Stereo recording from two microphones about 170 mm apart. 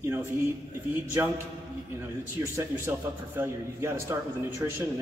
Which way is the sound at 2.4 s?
15° right (ahead or behind).